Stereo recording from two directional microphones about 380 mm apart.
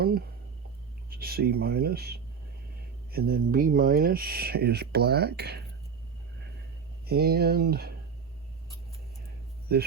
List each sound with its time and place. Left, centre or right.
1.1 s speech: right
7.0 s speech: right
9.7 s speech: right